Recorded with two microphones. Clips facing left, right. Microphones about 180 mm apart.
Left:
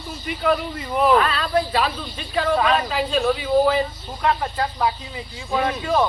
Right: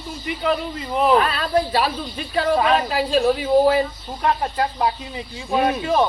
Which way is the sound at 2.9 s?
40° right (ahead or behind).